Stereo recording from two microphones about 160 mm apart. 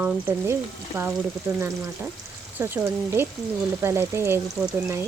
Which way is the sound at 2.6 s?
15° right (ahead or behind).